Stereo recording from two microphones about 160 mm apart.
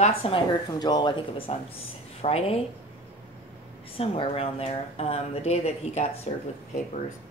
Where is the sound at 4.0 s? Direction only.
35° left (ahead or behind).